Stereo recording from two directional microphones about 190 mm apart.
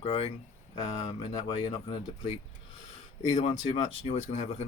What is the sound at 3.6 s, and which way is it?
Speech, 35° left (ahead or behind).